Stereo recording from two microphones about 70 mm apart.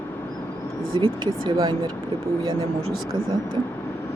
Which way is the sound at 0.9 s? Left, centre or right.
Right.